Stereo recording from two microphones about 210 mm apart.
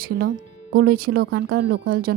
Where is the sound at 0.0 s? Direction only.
45° right (ahead or behind).